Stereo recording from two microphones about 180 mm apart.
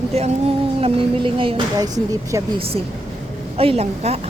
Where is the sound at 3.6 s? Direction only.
35° right (ahead or behind).